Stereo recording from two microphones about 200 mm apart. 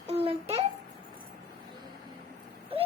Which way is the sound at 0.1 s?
30° right (ahead or behind).